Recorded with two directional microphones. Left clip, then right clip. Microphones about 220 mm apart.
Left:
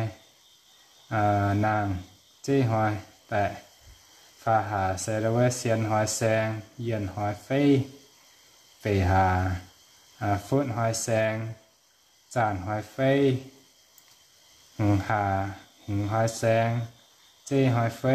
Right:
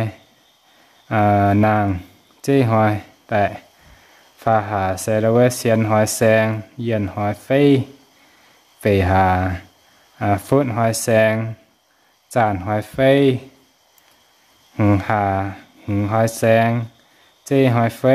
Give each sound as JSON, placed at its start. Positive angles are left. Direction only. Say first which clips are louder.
{"t": 1.0, "sound": "speech", "louder": "right 9 dB", "side_deg": -50}
{"t": 8.8, "sound": "speech", "louder": "right 8 dB", "side_deg": -50}
{"t": 14.8, "sound": "speech", "louder": "right 8 dB", "side_deg": -50}